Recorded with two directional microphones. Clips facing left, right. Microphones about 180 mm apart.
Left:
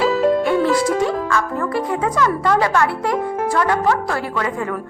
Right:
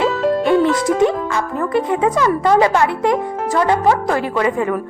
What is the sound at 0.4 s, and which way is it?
Speech, 20° right (ahead or behind).